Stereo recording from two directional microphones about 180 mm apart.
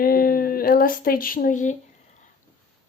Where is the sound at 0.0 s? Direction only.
55° left (ahead or behind).